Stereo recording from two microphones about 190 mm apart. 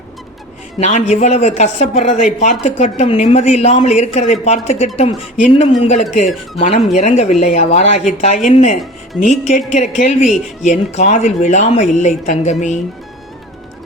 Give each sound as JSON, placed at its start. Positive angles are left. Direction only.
{"t": 0.8, "sound": "speech", "side_deg": 40}